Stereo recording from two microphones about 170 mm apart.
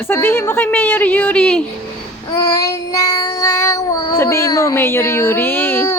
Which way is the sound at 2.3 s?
20° left (ahead or behind).